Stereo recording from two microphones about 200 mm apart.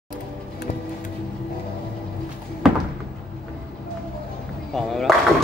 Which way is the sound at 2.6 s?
Centre (ahead or behind).